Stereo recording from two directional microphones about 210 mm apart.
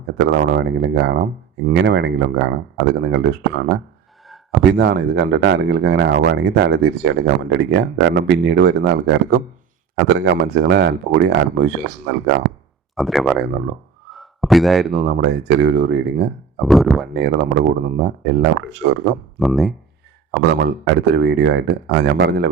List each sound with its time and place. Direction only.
0.2 s speech: 55° right (ahead or behind)
4.8 s speech: 55° right (ahead or behind)
13.0 s speech: centre (ahead or behind)
14.1 s a sound: centre (ahead or behind)
14.9 s speech: 50° right (ahead or behind)
16.6 s speech: centre (ahead or behind)
17.2 s speech: 50° right (ahead or behind)
19.4 s speech: centre (ahead or behind)
20.5 s speech: 55° right (ahead or behind)